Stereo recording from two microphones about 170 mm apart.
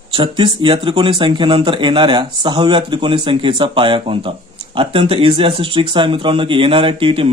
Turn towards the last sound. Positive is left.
turn(degrees=-30)  # may be behind; listen again after turning